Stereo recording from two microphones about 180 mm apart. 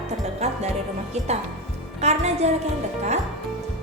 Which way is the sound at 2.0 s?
35° right (ahead or behind).